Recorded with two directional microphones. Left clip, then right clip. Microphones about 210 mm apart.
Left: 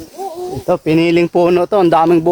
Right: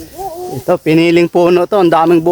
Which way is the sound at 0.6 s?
25° right (ahead or behind).